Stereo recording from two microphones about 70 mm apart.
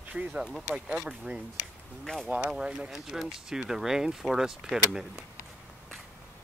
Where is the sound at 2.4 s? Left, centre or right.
Centre.